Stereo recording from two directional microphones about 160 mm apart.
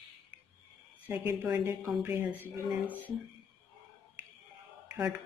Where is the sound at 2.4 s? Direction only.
10° left (ahead or behind).